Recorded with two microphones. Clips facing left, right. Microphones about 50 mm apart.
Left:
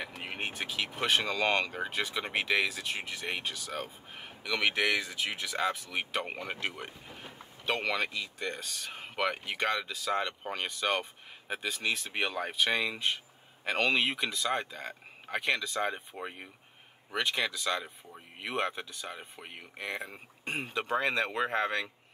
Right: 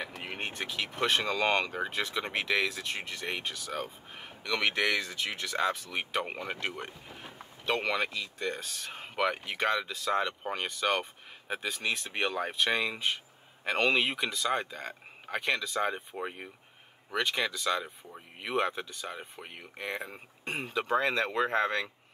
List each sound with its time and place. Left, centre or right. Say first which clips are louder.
0.2 s speech: left 2 dB; centre